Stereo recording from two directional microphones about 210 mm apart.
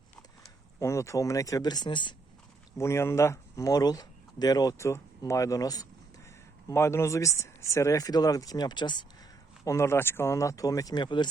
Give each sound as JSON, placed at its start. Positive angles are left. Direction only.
{"t": 0.8, "sound": "speech", "side_deg": 15}